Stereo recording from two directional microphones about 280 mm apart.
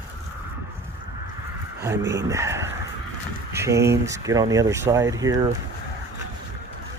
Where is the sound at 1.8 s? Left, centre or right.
Centre.